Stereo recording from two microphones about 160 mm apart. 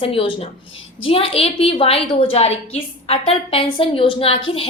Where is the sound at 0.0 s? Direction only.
35° left (ahead or behind).